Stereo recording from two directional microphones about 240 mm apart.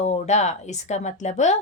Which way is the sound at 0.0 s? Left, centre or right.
Left.